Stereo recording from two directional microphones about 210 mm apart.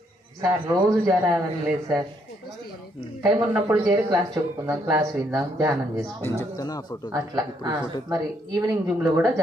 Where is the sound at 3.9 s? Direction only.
20° right (ahead or behind).